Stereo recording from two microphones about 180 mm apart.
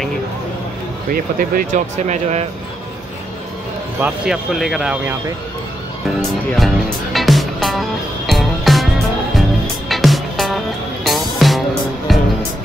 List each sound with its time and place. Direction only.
1.1 s speech: 50° right (ahead or behind)
4.0 s speech: centre (ahead or behind)
6.5 s music: centre (ahead or behind)
9.8 s music: centre (ahead or behind)